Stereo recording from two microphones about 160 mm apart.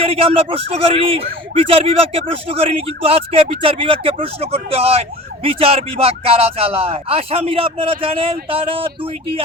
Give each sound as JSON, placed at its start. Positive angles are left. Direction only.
{"t": 0.0, "sound": "speech", "side_deg": -35}